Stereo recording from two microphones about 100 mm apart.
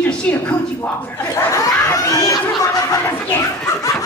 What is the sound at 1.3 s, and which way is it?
Speech, 30° left (ahead or behind).